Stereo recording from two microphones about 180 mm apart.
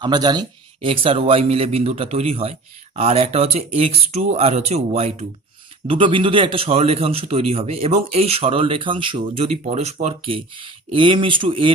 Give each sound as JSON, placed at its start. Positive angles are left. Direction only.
{"t": 0.0, "sound": "a man's voice", "side_deg": -25}